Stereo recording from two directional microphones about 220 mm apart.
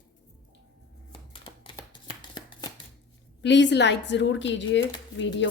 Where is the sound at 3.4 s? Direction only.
55° left (ahead or behind).